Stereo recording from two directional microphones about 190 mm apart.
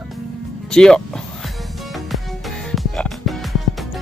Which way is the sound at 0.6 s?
5° left (ahead or behind).